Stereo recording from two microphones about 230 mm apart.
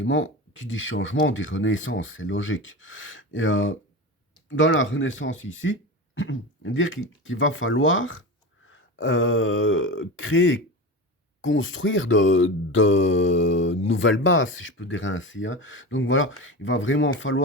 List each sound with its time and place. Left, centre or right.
0.0 s speech: left